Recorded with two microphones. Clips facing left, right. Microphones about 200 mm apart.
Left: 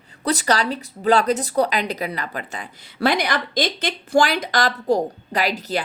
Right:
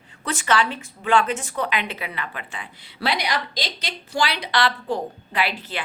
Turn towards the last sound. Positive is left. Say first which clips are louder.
# left 4 dB
turn(degrees=40)  # may be behind; listen again after turning